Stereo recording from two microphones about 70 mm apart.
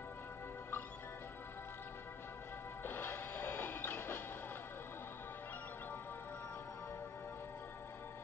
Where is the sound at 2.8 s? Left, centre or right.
Left.